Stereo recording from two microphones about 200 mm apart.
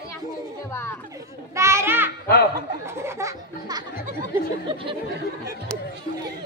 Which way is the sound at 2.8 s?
15° right (ahead or behind).